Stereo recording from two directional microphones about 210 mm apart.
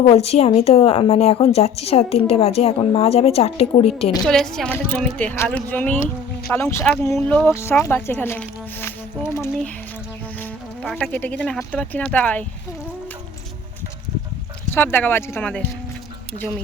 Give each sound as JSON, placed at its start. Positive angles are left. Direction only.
{"t": 0.1, "sound": "a woman's voice", "side_deg": 30}
{"t": 4.3, "sound": "speech", "side_deg": 5}
{"t": 14.7, "sound": "speech", "side_deg": 10}